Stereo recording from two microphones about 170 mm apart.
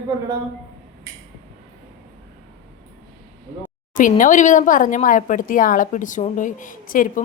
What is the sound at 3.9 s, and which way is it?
Speech, 50° left (ahead or behind).